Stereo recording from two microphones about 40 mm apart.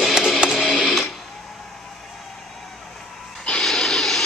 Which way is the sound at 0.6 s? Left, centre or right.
Centre.